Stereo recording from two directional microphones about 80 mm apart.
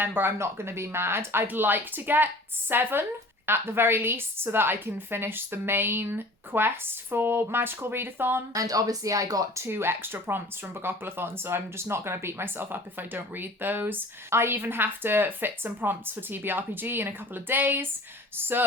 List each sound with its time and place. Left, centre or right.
0.0 s speech: right
8.5 s speech: right
9.6 s speech: right